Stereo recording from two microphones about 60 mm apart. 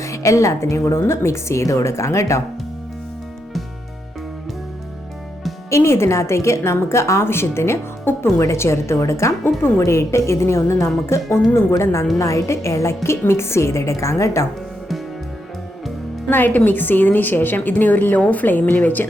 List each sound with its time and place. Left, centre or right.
0.0 s a woman's voice: left
5.7 s a woman's voice: left
9.4 s a woman's voice: left
9.8 s a woman's voice: left
16.3 s a woman's voice: left